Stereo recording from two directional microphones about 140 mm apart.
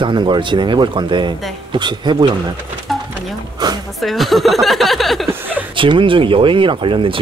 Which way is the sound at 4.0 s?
Centre (ahead or behind).